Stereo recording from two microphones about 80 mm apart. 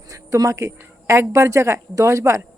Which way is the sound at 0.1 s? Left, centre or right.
Right.